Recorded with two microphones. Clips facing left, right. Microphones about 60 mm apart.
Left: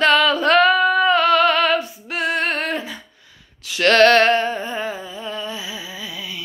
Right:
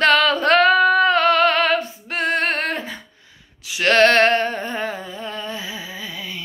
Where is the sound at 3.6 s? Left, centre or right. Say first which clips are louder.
Left 2 dB; centre.